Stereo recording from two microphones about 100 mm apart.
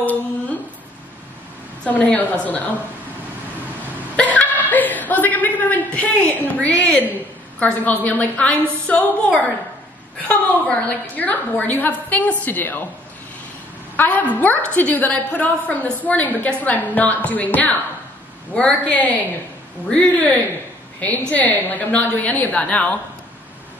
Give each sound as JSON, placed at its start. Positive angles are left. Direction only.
{"t": 0.0, "sound": "humming", "side_deg": 15}
{"t": 1.9, "sound": "a woman's voice", "side_deg": 15}
{"t": 4.2, "sound": "chuckle", "side_deg": 15}
{"t": 7.5, "sound": "a woman's voice", "side_deg": 15}
{"t": 13.9, "sound": "a woman's voice", "side_deg": 15}
{"t": 21.3, "sound": "a woman's voice", "side_deg": 15}